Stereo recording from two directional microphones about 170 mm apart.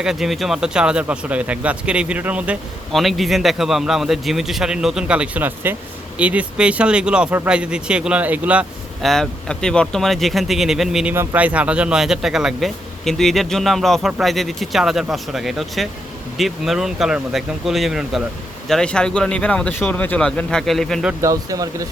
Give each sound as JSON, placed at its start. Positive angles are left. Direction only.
{"t": 0.0, "sound": "speech", "side_deg": -5}
{"t": 11.1, "sound": "speech", "side_deg": -15}
{"t": 21.1, "sound": "speech", "side_deg": -15}